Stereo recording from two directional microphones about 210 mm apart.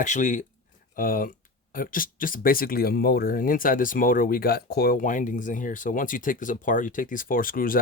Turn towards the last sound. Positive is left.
turn(degrees=40)  # may be behind; listen again after turning